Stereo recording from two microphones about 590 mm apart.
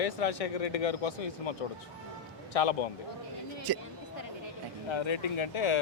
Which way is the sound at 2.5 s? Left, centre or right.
Left.